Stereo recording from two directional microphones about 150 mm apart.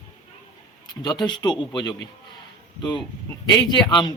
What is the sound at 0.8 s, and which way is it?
Speech, 30° left (ahead or behind).